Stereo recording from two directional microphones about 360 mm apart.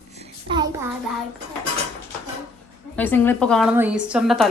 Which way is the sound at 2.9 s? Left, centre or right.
Centre.